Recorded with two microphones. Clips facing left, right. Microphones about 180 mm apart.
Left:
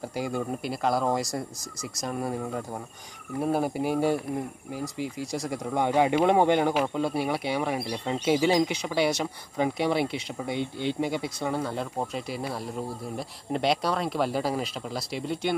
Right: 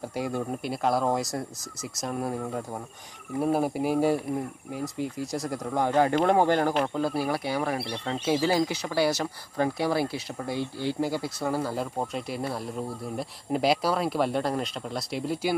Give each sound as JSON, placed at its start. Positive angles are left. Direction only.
{"t": 0.1, "sound": "speech", "side_deg": 0}
{"t": 7.4, "sound": "speech", "side_deg": 20}
{"t": 8.5, "sound": "speech", "side_deg": 20}
{"t": 11.2, "sound": "speech", "side_deg": -5}